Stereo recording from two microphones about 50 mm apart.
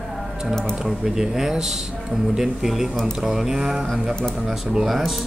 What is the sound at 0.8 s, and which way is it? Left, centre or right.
A man's voice, centre.